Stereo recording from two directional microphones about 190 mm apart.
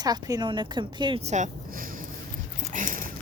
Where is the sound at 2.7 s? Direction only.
45° right (ahead or behind).